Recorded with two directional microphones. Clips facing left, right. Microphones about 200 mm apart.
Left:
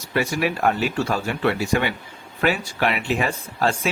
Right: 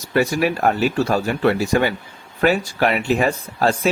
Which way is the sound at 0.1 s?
40° right (ahead or behind).